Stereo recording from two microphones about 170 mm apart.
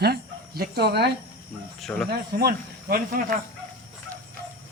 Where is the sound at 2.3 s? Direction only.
65° right (ahead or behind).